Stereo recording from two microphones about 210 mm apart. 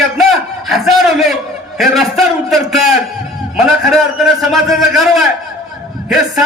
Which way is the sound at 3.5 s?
Centre (ahead or behind).